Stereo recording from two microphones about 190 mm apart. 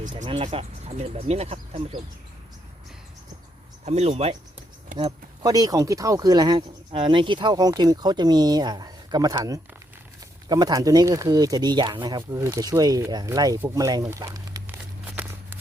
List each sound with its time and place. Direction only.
0.0 s speech: 40° right (ahead or behind)
3.8 s speech: 35° right (ahead or behind)
4.9 s speech: 20° right (ahead or behind)
15.0 s a sound: 10° right (ahead or behind)